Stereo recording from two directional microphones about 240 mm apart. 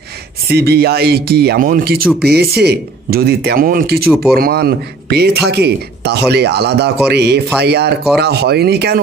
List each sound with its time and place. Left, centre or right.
0.5 s speech: right
4.1 s speech: centre
4.4 s speech: right